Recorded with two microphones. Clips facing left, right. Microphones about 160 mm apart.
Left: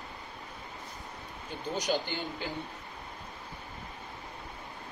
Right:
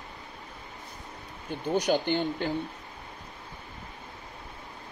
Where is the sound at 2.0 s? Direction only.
60° right (ahead or behind).